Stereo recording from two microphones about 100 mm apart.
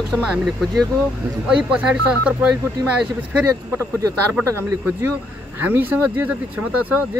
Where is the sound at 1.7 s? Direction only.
10° right (ahead or behind).